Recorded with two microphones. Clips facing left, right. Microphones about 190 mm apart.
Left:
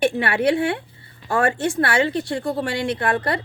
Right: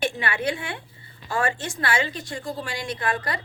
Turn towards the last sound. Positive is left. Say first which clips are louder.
# left 6 dB
turn(degrees=60)  # may be behind; listen again after turning